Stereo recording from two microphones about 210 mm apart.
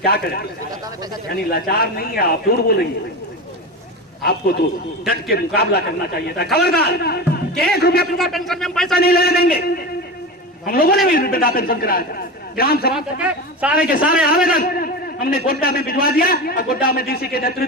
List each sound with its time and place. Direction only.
0.0 s a man's voice: 45° left (ahead or behind)
1.5 s a man's voice: 45° left (ahead or behind)
4.2 s a man's voice: 50° left (ahead or behind)
8.2 s speech: centre (ahead or behind)
9.0 s a man's voice: 45° left (ahead or behind)
12.9 s speech: 5° right (ahead or behind)
13.7 s a man's voice: 45° left (ahead or behind)